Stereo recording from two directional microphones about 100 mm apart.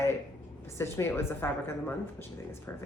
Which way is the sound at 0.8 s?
25° left (ahead or behind).